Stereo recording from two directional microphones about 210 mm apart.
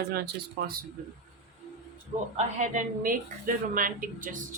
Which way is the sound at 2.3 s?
35° right (ahead or behind).